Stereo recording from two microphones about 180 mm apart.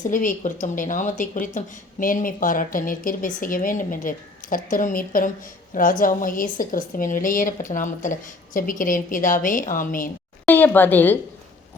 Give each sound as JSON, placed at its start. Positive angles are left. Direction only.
{"t": 0.1, "sound": "speech", "side_deg": 45}
{"t": 10.4, "sound": "a woman's voice", "side_deg": 10}